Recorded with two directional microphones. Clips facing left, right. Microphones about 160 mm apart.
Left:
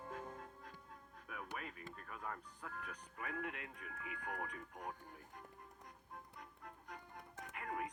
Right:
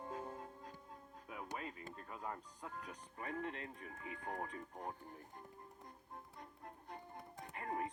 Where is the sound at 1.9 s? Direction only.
25° right (ahead or behind).